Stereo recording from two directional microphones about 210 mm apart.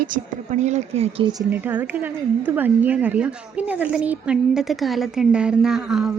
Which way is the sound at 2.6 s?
10° right (ahead or behind).